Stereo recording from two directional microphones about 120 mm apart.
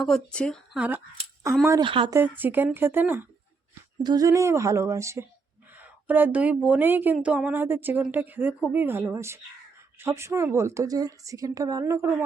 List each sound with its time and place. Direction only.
0.0 s speech: 5° left (ahead or behind)
0.8 s speech: 15° right (ahead or behind)
1.8 s speech: 45° right (ahead or behind)
2.1 s speech: 15° right (ahead or behind)
4.0 s a woman's voice: 30° right (ahead or behind)